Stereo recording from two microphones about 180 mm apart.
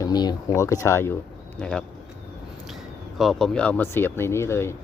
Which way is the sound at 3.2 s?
Centre (ahead or behind).